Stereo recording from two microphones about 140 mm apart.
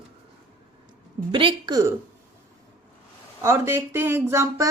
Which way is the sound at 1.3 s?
35° right (ahead or behind).